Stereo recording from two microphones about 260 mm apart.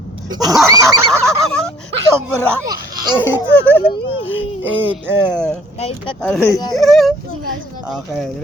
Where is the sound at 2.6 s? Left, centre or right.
Centre.